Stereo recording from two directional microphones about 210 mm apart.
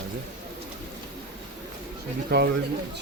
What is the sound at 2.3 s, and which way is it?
Speech, 50° right (ahead or behind).